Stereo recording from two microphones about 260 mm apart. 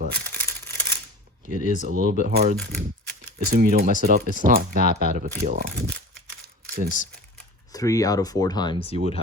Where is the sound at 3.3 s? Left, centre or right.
Right.